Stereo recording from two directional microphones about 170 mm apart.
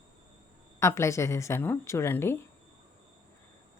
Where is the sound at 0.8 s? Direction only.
15° left (ahead or behind).